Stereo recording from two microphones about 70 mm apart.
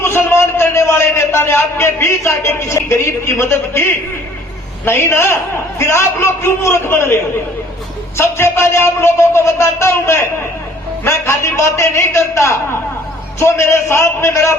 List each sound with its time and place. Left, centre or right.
0.0 s a man's voice: left
4.9 s a man's voice: left
8.2 s a man's voice: left